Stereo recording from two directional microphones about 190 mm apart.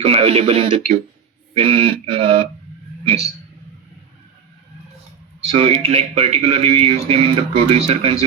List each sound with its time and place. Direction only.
0.0 s speech: 30° right (ahead or behind)
1.5 s mantra: 30° right (ahead or behind)
5.5 s speech: 30° right (ahead or behind)